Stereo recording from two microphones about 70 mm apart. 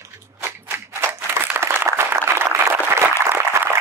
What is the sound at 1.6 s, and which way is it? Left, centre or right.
Applause, right.